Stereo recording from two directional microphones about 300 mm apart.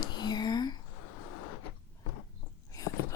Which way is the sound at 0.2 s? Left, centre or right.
Centre.